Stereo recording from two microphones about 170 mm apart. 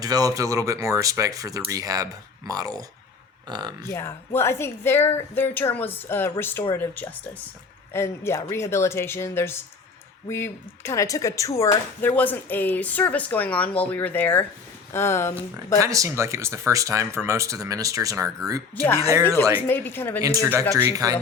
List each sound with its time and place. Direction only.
0.0 s speech: 20° right (ahead or behind)
3.8 s speech: 15° left (ahead or behind)
15.8 s speech: 20° right (ahead or behind)
19.6 s speech: 10° left (ahead or behind)
20.4 s speech: 15° right (ahead or behind)